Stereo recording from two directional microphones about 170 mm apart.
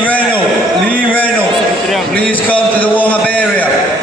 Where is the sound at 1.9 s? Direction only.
5° left (ahead or behind).